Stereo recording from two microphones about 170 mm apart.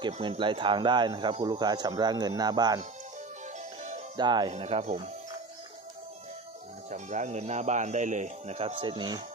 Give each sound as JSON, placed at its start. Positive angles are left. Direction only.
{"t": 0.0, "sound": "speech", "side_deg": -30}
{"t": 4.2, "sound": "speech", "side_deg": -25}
{"t": 4.5, "sound": "speech", "side_deg": -40}
{"t": 6.9, "sound": "speech", "side_deg": -45}